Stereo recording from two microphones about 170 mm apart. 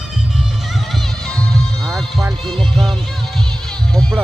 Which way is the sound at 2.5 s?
5° left (ahead or behind).